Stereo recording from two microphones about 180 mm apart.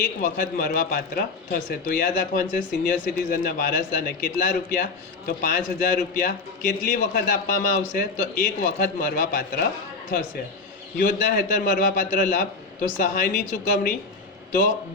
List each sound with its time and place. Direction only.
0.0 s speech: 50° left (ahead or behind)
11.0 s speech: 50° left (ahead or behind)